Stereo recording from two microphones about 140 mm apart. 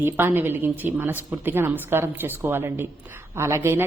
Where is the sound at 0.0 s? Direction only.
15° right (ahead or behind).